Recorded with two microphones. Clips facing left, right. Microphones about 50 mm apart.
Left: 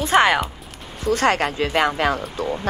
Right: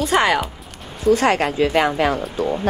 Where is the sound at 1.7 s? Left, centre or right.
Left.